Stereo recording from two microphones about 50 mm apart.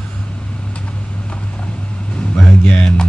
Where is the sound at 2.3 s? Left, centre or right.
Left.